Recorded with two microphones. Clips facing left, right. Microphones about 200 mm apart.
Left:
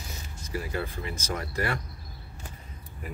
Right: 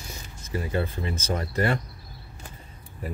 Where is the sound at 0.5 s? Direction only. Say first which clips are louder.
Right 4 dB; 25° right (ahead or behind).